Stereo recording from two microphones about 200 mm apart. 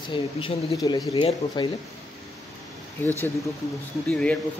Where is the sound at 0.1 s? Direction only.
25° left (ahead or behind).